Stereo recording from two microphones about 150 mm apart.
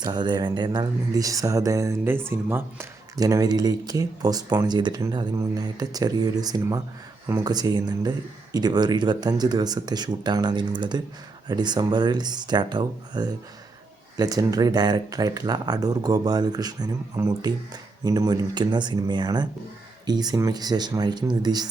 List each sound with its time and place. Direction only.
0.0 s speech: 30° right (ahead or behind)